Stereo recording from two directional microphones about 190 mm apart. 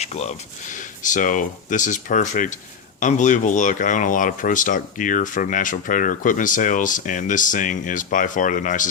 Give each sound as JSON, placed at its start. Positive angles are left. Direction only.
{"t": 0.0, "sound": "speech", "side_deg": 35}